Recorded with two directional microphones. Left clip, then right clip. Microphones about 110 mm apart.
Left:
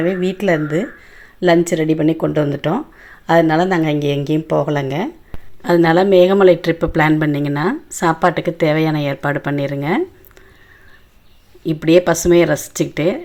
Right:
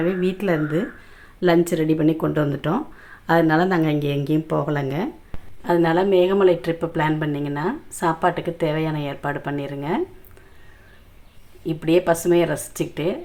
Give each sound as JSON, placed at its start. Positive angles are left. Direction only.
{"t": 0.0, "sound": "a woman's voice", "side_deg": 20}
{"t": 5.6, "sound": "speech", "side_deg": 50}
{"t": 11.6, "sound": "speech", "side_deg": 45}